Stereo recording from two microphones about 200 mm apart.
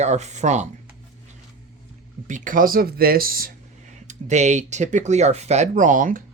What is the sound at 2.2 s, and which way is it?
Speech, 40° right (ahead or behind).